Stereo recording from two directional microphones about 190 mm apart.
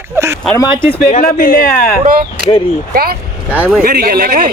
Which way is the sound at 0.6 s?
25° left (ahead or behind).